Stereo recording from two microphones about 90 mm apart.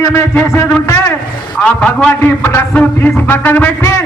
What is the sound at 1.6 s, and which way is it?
Speech, 15° left (ahead or behind).